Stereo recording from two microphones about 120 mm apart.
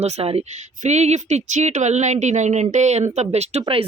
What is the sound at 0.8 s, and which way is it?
Speech, 70° right (ahead or behind).